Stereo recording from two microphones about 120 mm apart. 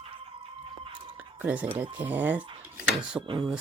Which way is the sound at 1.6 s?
50° right (ahead or behind).